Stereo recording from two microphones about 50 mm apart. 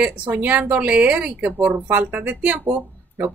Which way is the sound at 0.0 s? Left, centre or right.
Right.